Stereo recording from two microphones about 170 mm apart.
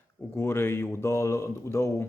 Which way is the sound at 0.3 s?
15° left (ahead or behind).